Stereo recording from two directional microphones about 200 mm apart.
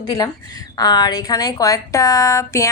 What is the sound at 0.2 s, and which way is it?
Speech, 20° left (ahead or behind).